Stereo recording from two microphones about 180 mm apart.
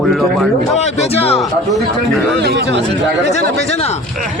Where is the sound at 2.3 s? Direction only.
70° right (ahead or behind).